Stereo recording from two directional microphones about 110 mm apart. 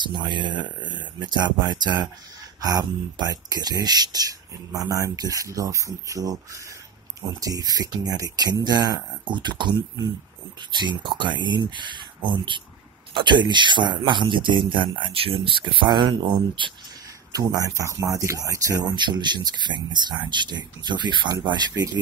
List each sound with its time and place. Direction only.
0.0 s speech: 45° right (ahead or behind)
10.8 s speech: 45° right (ahead or behind)
17.3 s speech: 35° right (ahead or behind)
18.9 s speech: 45° right (ahead or behind)